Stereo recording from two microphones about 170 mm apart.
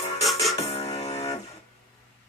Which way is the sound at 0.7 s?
40° left (ahead or behind).